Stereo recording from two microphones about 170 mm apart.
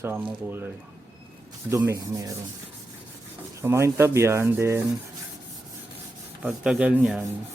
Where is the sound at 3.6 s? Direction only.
15° right (ahead or behind).